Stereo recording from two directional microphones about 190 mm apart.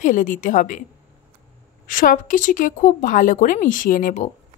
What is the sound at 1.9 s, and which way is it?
Speech, 45° left (ahead or behind).